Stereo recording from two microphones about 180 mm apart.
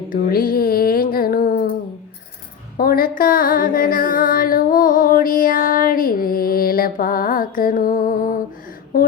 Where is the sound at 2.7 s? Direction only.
55° left (ahead or behind).